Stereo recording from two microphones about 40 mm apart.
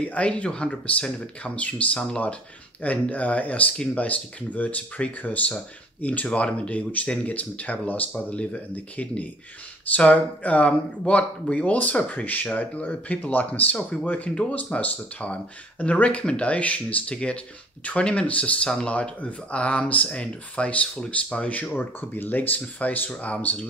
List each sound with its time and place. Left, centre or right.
0.1 s speech: left
2.8 s speech: left
21.7 s speech: left